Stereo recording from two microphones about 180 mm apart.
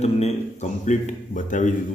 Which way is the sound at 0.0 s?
35° left (ahead or behind).